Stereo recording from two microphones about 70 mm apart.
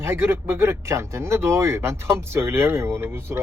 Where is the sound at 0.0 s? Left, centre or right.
Right.